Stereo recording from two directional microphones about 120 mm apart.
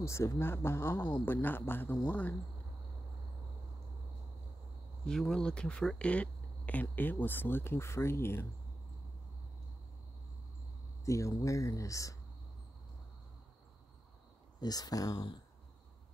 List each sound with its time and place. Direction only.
0.0 s speech: 25° left (ahead or behind)
5.0 s speech: 5° left (ahead or behind); by 8.5 s 20° left (ahead or behind)
11.1 s speech: 25° left (ahead or behind)
14.6 s speech: 30° left (ahead or behind)